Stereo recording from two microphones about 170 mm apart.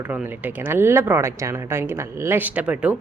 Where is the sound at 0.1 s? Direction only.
10° right (ahead or behind).